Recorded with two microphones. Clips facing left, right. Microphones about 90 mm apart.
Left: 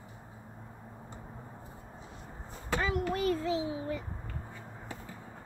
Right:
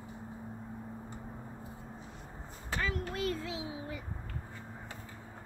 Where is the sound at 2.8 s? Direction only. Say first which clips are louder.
Left 4 dB; 15° left (ahead or behind); by 4.0 s 5° right (ahead or behind).